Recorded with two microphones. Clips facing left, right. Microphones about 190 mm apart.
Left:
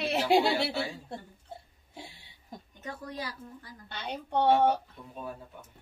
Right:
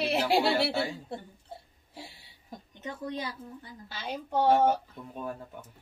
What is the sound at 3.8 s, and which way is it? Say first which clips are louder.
Speech: right 1 dB; 5° right (ahead or behind).